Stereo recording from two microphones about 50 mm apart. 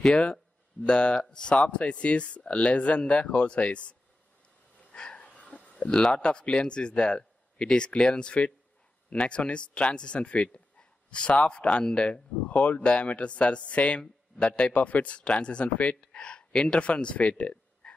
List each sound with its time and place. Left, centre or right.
0.0 s speech: centre
4.7 s a sound: centre
5.8 s a man's voice: centre
14.7 s speech: left